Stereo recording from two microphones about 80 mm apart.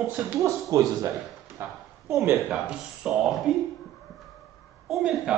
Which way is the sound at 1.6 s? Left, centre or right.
Right.